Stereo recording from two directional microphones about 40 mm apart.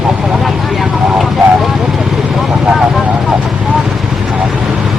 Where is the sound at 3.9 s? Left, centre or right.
Centre.